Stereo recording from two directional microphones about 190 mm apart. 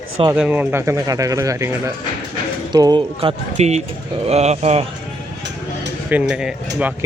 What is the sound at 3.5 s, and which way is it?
Speech, 35° right (ahead or behind).